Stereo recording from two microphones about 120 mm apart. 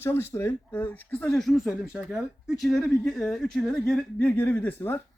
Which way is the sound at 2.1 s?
Centre (ahead or behind).